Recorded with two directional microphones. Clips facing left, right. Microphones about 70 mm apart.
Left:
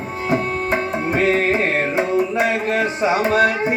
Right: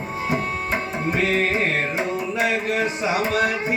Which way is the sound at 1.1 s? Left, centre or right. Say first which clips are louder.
Left 4 dB; left.